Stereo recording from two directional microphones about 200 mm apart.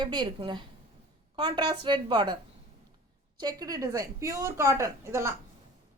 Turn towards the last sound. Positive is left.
turn(degrees=-10)  # may be behind; listen again after turning